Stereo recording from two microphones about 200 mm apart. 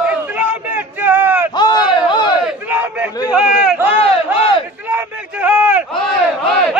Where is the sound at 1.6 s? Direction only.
20° left (ahead or behind).